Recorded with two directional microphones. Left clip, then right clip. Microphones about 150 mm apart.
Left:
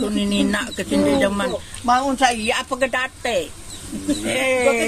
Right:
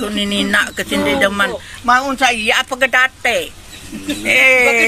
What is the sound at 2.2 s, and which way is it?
Speech, 30° left (ahead or behind).